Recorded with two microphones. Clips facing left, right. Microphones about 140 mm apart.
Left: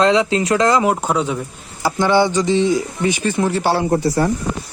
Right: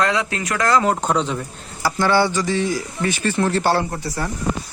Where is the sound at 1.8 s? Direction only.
20° left (ahead or behind).